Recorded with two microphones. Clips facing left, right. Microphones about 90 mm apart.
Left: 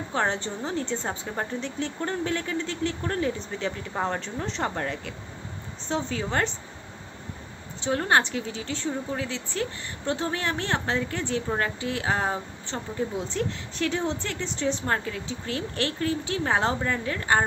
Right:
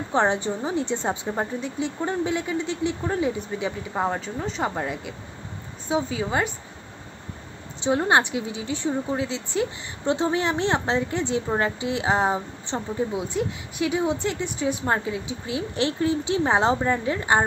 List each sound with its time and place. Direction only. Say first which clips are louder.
0.1 s a woman's voice: right 5 dB; 15° right (ahead or behind)
7.8 s a woman's voice: right 3 dB; 15° right (ahead or behind)